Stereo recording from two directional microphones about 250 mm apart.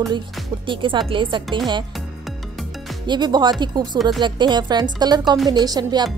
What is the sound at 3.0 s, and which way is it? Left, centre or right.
Speech, centre.